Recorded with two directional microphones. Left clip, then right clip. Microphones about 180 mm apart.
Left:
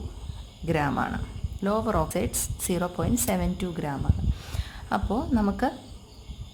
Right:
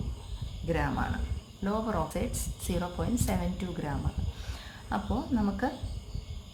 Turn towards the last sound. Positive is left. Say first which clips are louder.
# left 5 dB
turn(degrees=45)  # may be behind; listen again after turning